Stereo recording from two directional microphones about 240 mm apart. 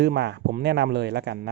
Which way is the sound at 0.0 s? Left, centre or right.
Right.